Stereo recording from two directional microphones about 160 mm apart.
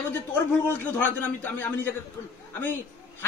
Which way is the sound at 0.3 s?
10° left (ahead or behind).